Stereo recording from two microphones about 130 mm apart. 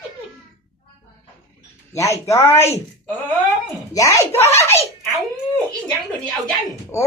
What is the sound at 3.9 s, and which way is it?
Speech, 25° left (ahead or behind).